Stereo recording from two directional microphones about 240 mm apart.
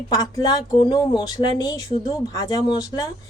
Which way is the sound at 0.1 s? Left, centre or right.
Centre.